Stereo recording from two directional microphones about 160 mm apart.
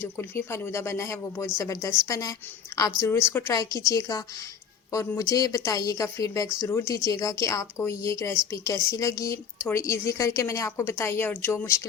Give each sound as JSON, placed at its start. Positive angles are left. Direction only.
{"t": 0.0, "sound": "a woman's voice", "side_deg": 15}